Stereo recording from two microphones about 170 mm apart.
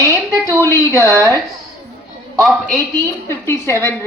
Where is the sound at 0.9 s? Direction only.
20° right (ahead or behind).